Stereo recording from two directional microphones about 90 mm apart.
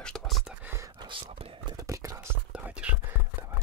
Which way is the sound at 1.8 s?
40° right (ahead or behind).